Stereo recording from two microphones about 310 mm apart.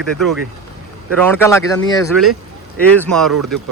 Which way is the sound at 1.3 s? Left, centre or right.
Centre.